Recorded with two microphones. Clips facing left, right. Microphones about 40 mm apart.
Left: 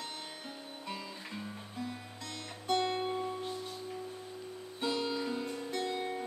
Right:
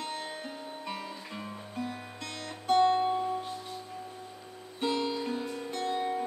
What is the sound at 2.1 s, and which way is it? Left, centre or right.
Music, right.